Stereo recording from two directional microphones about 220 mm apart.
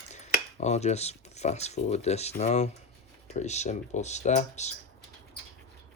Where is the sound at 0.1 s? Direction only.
30° left (ahead or behind).